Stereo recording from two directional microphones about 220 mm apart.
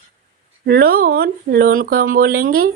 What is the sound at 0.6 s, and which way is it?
Speech, 45° right (ahead or behind).